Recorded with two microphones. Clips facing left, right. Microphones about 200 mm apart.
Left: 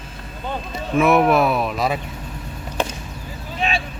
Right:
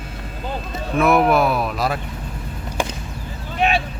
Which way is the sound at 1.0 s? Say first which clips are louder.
Even; centre (ahead or behind).